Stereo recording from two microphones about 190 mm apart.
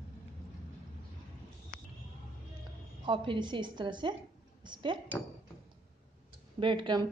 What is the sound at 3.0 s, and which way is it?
A woman's voice, 25° right (ahead or behind).